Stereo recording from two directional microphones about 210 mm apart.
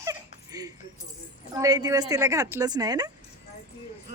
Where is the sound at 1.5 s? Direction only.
20° right (ahead or behind).